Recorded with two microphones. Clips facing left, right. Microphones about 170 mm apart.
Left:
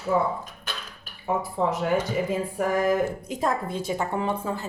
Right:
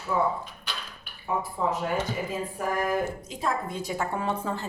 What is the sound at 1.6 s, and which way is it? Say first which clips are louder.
Speech: left 3 dB; 70° left (ahead or behind).